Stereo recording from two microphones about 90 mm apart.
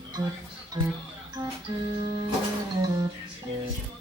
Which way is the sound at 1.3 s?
40° right (ahead or behind).